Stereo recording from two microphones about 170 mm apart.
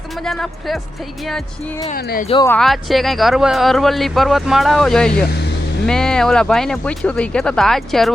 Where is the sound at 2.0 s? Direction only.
65° left (ahead or behind).